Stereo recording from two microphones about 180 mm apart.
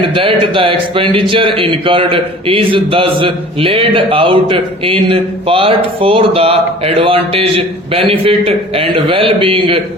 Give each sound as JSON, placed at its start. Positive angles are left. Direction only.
{"t": 0.0, "sound": "a man's voice", "side_deg": -30}